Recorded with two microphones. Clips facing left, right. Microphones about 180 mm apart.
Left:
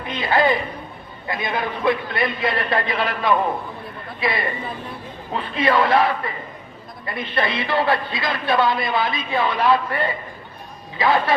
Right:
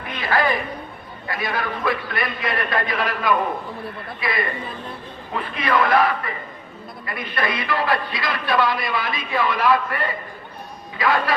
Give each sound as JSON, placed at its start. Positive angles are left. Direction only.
{"t": 0.1, "sound": "a man's voice", "side_deg": 25}